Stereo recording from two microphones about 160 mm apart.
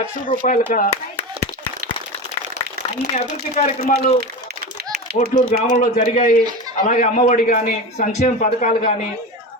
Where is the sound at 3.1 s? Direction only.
45° left (ahead or behind).